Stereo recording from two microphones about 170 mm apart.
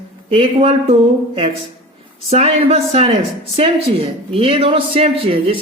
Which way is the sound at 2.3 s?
35° right (ahead or behind).